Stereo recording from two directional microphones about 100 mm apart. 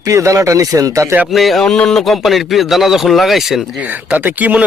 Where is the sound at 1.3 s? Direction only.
Centre (ahead or behind).